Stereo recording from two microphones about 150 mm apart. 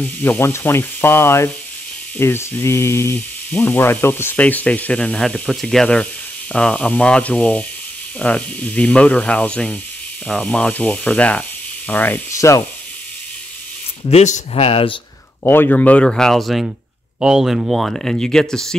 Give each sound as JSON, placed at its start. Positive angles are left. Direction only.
{"t": 0.0, "sound": "speech", "side_deg": 15}
{"t": 14.1, "sound": "speech", "side_deg": 50}
{"t": 15.4, "sound": "speech", "side_deg": 15}